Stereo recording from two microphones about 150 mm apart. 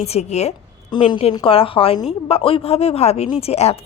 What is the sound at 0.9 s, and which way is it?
A woman's voice, 35° left (ahead or behind).